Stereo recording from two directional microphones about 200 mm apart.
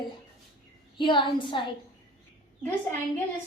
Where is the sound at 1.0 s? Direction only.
25° left (ahead or behind).